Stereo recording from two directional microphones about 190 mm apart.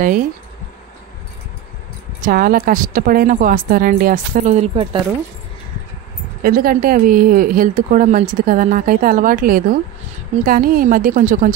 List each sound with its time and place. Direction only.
0.0 s a woman's voice: 45° right (ahead or behind)
2.2 s a woman's voice: 50° right (ahead or behind); by 5.0 s 35° right (ahead or behind)
6.4 s a woman's voice: 50° right (ahead or behind)